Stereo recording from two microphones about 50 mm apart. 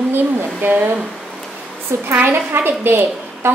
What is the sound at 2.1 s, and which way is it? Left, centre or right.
Speech, right.